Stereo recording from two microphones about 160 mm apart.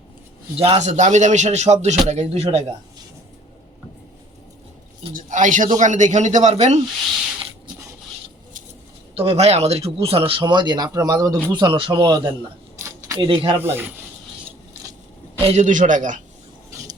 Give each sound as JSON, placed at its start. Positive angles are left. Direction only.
{"t": 0.5, "sound": "speech", "side_deg": -35}
{"t": 0.9, "sound": "speech", "side_deg": -50}
{"t": 5.1, "sound": "speech", "side_deg": -55}
{"t": 9.1, "sound": "speech", "side_deg": -40}
{"t": 13.6, "sound": "speech", "side_deg": -15}
{"t": 15.4, "sound": "speech", "side_deg": -50}